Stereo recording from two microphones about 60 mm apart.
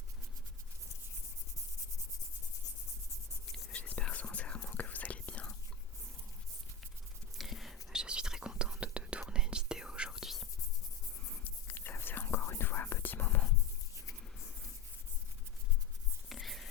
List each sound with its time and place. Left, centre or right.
3.7 s whispering: left
7.3 s whispering: centre
11.7 s whispering: left
16.3 s whispering: centre